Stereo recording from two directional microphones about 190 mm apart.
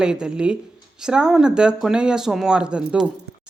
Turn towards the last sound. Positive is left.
turn(degrees=-5)  # may be behind; listen again after turning